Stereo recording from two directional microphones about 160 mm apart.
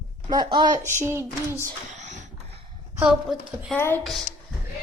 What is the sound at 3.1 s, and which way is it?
Speech, centre (ahead or behind).